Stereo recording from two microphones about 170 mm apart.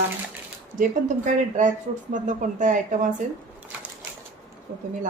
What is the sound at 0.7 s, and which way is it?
Speech, 50° right (ahead or behind).